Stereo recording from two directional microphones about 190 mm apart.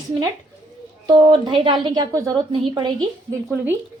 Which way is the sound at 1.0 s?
25° right (ahead or behind).